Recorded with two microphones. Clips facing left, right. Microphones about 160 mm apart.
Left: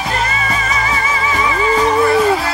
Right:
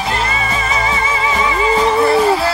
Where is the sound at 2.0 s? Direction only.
30° right (ahead or behind).